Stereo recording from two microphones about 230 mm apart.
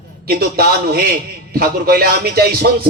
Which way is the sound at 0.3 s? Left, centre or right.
Right.